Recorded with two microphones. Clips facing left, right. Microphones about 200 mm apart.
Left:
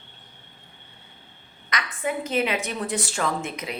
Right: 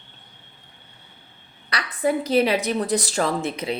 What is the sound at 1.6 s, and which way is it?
A woman's voice, 35° right (ahead or behind).